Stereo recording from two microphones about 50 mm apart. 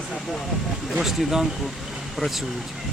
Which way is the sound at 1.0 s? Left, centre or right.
Centre.